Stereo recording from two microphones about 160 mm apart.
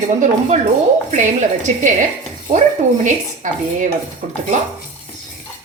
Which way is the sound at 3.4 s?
55° right (ahead or behind).